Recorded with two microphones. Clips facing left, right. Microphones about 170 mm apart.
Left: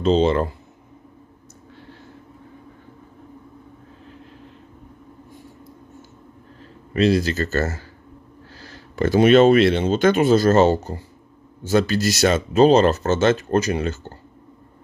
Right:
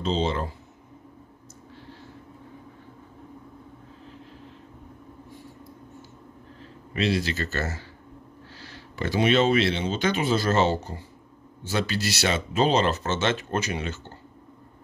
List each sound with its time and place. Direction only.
0.0 s speech: 55° left (ahead or behind)
6.9 s speech: 40° left (ahead or behind)